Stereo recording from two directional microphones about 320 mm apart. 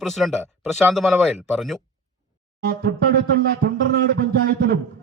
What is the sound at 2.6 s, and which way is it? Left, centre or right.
Speech, right.